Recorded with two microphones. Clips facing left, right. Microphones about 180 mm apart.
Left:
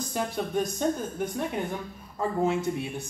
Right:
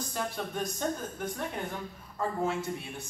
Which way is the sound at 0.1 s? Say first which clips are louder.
Left 8 dB; 15° left (ahead or behind).